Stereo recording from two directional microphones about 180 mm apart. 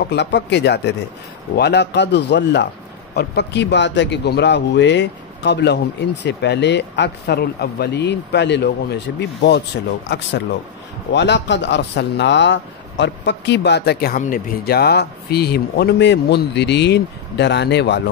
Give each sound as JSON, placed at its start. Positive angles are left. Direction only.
{"t": 0.1, "sound": "speech", "side_deg": 75}
{"t": 14.2, "sound": "speech", "side_deg": 50}